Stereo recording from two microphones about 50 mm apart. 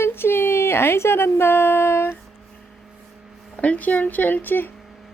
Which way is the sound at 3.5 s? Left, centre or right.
Left.